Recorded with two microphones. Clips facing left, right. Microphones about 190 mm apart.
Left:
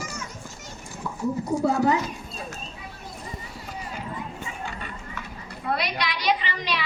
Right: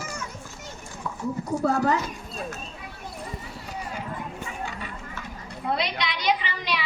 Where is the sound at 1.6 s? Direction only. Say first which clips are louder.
Left 1 dB; 10° left (ahead or behind).